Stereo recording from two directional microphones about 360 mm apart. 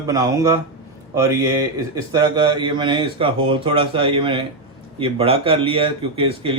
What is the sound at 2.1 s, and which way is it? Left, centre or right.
Speech, centre.